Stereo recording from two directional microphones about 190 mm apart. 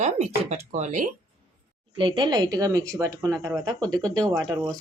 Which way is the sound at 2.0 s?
25° right (ahead or behind).